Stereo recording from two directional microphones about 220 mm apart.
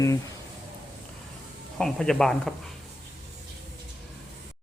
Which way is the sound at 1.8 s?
Centre (ahead or behind).